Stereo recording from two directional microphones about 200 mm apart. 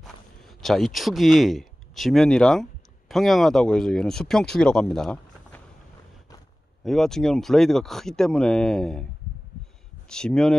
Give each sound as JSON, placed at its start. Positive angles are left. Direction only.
{"t": 0.0, "sound": "speech", "side_deg": 0}
{"t": 4.9, "sound": "a sound", "side_deg": 5}
{"t": 6.8, "sound": "speech", "side_deg": 0}
{"t": 10.0, "sound": "speech", "side_deg": 5}